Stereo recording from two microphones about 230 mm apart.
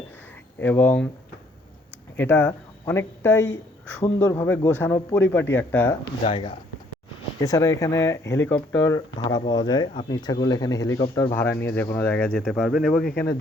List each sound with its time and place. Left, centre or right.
0.6 s speech: centre
2.1 s speech: centre
6.2 s speech: left; by 13.1 s centre